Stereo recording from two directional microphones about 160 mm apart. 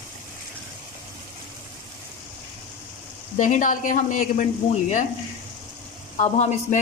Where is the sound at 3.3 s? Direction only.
50° left (ahead or behind).